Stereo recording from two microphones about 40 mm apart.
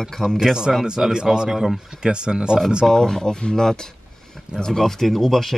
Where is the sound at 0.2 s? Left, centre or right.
Centre.